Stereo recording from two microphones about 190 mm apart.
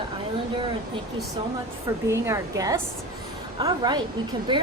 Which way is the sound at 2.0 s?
15° right (ahead or behind).